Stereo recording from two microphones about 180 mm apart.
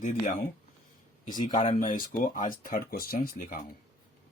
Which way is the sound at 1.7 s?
50° left (ahead or behind).